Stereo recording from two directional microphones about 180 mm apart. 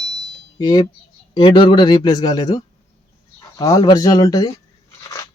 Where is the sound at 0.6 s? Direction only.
20° left (ahead or behind).